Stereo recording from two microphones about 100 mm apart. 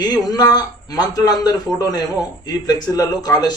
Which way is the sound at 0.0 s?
40° left (ahead or behind).